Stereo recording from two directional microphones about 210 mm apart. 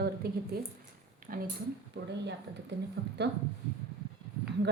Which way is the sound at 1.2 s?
40° right (ahead or behind).